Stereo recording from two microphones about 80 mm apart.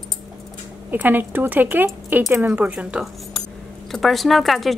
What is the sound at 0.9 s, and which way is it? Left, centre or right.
Speech, right.